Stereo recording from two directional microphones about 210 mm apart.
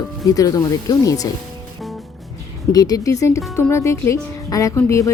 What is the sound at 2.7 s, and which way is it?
Speech, 15° left (ahead or behind).